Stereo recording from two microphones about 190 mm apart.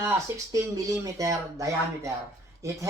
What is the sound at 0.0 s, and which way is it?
Speech, 15° right (ahead or behind).